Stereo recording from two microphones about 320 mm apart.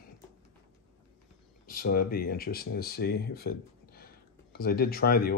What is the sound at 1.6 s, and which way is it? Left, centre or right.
Speech, left.